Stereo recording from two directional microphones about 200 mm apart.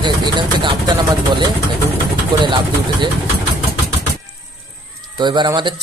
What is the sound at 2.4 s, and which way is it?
Speech, 25° right (ahead or behind).